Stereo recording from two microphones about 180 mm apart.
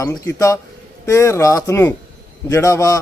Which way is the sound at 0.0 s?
15° left (ahead or behind).